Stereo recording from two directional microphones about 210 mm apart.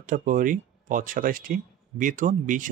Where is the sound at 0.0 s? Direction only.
40° right (ahead or behind).